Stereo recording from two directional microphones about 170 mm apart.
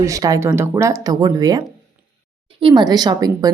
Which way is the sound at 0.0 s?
20° right (ahead or behind).